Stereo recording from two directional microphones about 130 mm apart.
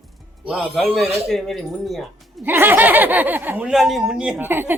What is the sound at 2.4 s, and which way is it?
Speech, 15° right (ahead or behind).